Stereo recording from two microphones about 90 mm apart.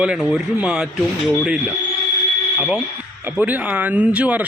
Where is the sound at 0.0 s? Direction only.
10° right (ahead or behind).